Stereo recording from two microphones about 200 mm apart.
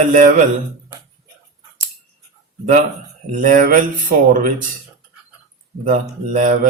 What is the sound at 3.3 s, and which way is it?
Speech, 40° right (ahead or behind).